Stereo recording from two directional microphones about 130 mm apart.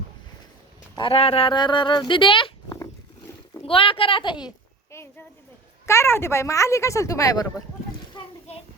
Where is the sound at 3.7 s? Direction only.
45° left (ahead or behind).